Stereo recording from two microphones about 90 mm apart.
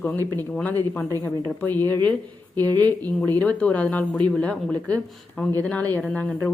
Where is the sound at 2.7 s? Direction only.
45° right (ahead or behind).